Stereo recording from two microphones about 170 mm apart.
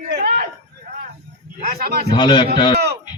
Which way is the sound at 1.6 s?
60° right (ahead or behind).